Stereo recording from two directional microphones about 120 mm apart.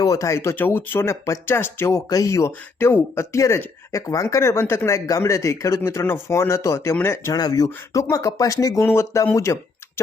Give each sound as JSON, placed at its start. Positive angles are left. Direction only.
{"t": 0.0, "sound": "speech", "side_deg": 25}